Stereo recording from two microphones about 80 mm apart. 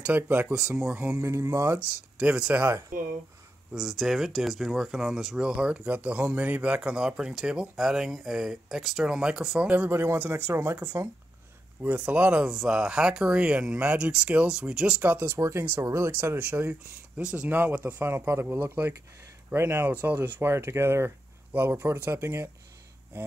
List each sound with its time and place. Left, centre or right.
0.0 s speech: right
0.6 s speech: centre
1.1 s speech: right
2.1 s speech: centre
3.7 s speech: centre; by 10.8 s right
11.8 s speech: centre
15.0 s speech: right
17.2 s speech: centre
18.0 s speech: right